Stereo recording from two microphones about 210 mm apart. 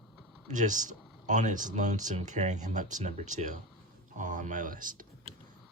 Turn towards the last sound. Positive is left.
turn(degrees=-40)  # may be behind; listen again after turning